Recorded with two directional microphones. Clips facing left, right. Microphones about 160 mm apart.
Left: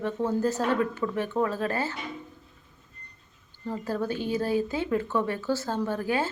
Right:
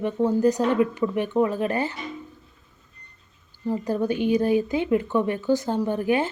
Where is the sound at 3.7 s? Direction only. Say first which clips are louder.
Right 5 dB; 15° right (ahead or behind).